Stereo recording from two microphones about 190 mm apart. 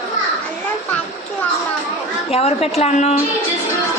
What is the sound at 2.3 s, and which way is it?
Speech, 30° left (ahead or behind).